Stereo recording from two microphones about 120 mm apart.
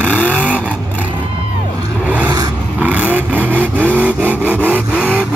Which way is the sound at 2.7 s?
10° right (ahead or behind).